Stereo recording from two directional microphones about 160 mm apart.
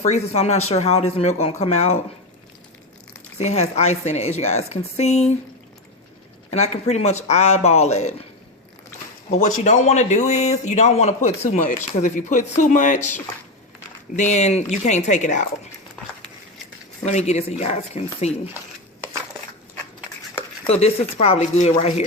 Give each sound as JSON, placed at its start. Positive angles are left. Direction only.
{"t": 0.0, "sound": "speech", "side_deg": 45}
{"t": 3.3, "sound": "speech", "side_deg": 45}
{"t": 6.5, "sound": "speech", "side_deg": 45}
{"t": 9.3, "sound": "speech", "side_deg": 50}
{"t": 17.1, "sound": "speech", "side_deg": 45}
{"t": 20.7, "sound": "speech", "side_deg": 40}